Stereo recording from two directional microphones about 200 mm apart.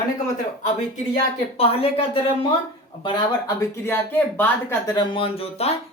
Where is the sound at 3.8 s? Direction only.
10° left (ahead or behind).